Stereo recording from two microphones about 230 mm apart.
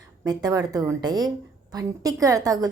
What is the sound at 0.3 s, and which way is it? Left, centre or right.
Speech, centre.